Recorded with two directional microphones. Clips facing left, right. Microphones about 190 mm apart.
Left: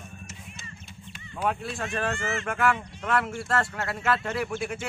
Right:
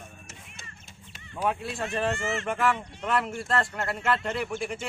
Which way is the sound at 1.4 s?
Centre (ahead or behind).